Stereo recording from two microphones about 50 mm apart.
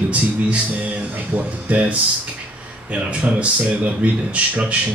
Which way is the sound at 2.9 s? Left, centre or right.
Right.